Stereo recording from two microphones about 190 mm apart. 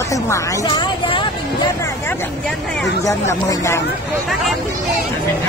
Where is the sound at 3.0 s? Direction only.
15° left (ahead or behind).